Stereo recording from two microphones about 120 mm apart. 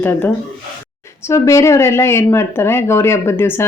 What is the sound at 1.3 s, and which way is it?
Speech, 25° left (ahead or behind).